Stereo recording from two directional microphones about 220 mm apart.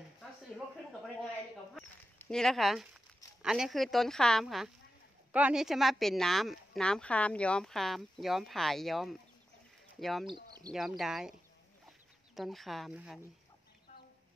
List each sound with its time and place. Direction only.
1.8 s speech: 5° left (ahead or behind)
10.2 s bird: 20° right (ahead or behind)
10.7 s speech: centre (ahead or behind)
12.4 s speech: centre (ahead or behind)